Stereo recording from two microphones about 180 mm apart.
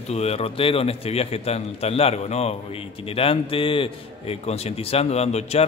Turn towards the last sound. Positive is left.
turn(degrees=35)  # may be behind; listen again after turning